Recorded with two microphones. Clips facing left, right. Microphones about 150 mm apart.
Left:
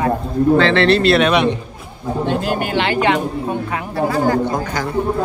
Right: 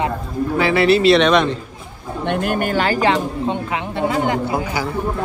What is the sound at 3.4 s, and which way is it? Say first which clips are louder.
Speech: even; 25° right (ahead or behind).